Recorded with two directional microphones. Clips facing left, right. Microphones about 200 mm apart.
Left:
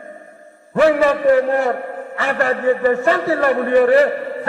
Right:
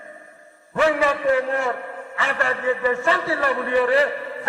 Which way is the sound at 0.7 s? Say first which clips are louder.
Left 6 dB; 40° left (ahead or behind).